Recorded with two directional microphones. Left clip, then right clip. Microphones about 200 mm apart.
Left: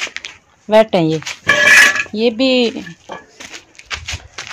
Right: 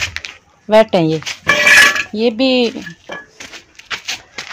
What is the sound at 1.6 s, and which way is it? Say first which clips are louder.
Dishes: even; 15° right (ahead or behind).